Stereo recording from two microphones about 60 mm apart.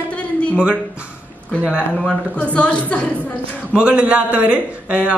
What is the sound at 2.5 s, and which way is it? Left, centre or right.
Speech, left.